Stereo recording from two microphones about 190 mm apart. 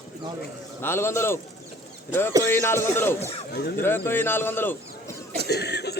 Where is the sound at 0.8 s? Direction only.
10° left (ahead or behind).